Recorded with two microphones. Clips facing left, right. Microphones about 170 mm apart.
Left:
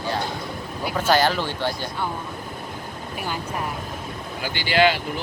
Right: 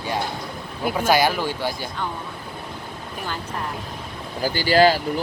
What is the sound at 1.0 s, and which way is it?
Speech, 10° right (ahead or behind).